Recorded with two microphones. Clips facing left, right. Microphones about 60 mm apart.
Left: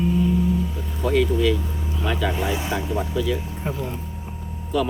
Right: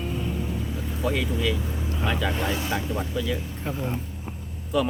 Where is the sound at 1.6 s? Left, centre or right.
Centre.